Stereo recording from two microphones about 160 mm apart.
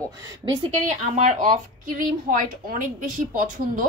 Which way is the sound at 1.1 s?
50° right (ahead or behind).